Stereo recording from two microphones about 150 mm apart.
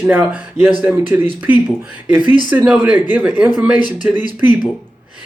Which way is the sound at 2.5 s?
10° right (ahead or behind).